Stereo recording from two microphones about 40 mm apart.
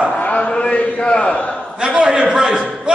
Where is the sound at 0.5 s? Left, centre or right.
Left.